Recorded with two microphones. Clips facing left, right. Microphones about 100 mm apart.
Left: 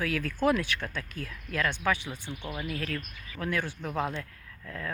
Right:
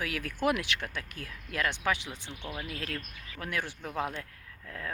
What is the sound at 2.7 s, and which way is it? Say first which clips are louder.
Speech: left 7 dB; 25° right (ahead or behind).